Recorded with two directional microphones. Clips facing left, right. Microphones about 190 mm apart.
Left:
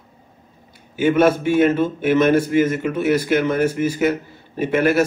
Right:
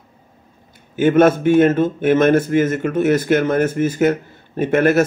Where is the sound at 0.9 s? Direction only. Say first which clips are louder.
Right 3 dB; 50° right (ahead or behind).